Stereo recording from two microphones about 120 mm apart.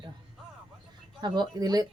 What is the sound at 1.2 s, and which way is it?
Speech, 35° right (ahead or behind).